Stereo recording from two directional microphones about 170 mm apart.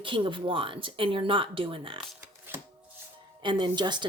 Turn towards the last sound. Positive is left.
turn(degrees=-25)  # may be behind; listen again after turning